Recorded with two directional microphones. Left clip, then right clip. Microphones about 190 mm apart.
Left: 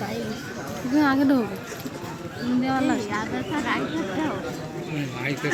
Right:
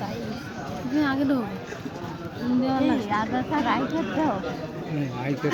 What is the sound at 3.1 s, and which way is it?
Speech, 55° right (ahead or behind).